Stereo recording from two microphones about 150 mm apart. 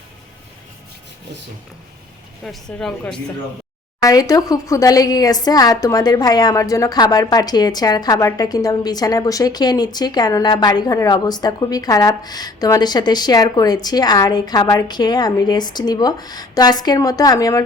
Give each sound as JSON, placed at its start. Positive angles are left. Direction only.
{"t": 2.4, "sound": "speech", "side_deg": 5}
{"t": 4.0, "sound": "a woman's voice", "side_deg": 25}